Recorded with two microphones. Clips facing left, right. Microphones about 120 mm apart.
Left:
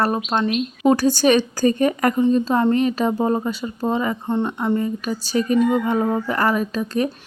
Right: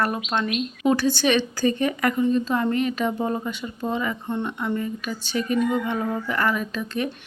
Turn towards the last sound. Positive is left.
turn(degrees=40)  # may be behind; listen again after turning